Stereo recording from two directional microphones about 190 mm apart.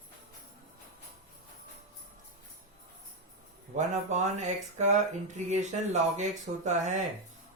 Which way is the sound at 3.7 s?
40° right (ahead or behind).